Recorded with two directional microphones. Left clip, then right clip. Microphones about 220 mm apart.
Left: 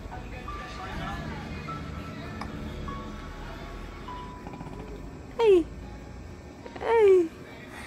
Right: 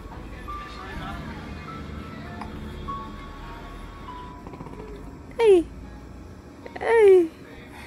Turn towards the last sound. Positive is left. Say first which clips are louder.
# right 4 dB
turn(degrees=-15)  # may be behind; listen again after turning